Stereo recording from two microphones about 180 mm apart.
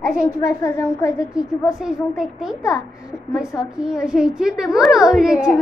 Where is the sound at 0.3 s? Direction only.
20° left (ahead or behind).